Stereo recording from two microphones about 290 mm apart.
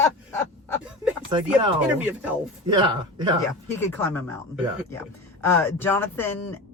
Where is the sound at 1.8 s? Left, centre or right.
Centre.